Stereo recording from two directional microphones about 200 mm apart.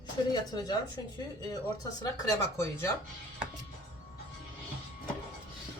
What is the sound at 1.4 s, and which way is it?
Speech, 20° left (ahead or behind).